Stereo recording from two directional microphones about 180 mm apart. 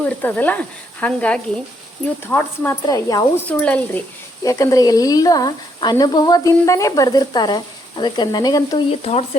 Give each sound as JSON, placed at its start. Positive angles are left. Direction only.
{"t": 0.0, "sound": "speech", "side_deg": 10}
{"t": 3.6, "sound": "speech", "side_deg": 10}
{"t": 4.4, "sound": "speech", "side_deg": 20}
{"t": 8.9, "sound": "stir", "side_deg": 35}